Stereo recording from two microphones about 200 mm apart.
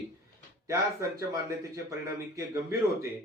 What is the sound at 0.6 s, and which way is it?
Speech, 15° right (ahead or behind).